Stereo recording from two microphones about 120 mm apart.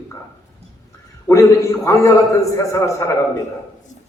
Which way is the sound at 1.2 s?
25° left (ahead or behind).